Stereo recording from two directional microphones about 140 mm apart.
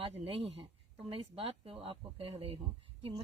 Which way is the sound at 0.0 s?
40° right (ahead or behind).